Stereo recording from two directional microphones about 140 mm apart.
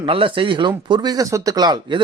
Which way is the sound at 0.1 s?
40° right (ahead or behind).